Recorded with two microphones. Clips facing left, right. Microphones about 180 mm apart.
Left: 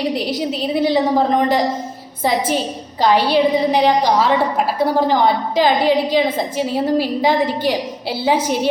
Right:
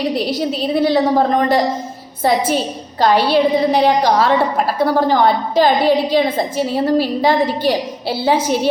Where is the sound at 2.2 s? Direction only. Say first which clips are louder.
Right 2 dB; 15° left (ahead or behind).